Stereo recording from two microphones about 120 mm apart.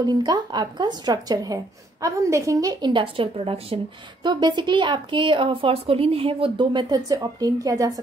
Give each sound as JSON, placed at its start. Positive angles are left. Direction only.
{"t": 0.0, "sound": "a woman's voice", "side_deg": -35}
{"t": 2.9, "sound": "a woman's voice", "side_deg": -45}
{"t": 4.2, "sound": "a woman's voice", "side_deg": -40}